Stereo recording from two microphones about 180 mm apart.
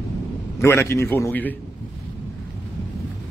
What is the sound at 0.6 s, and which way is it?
Speech, 15° left (ahead or behind).